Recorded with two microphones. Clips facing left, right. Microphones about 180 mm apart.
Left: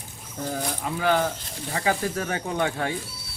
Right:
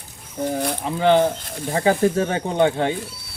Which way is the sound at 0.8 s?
25° right (ahead or behind).